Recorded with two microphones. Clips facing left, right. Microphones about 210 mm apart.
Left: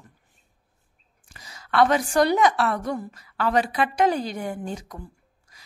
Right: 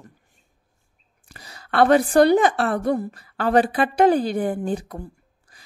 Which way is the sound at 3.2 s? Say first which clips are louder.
Right 2 dB; 50° right (ahead or behind).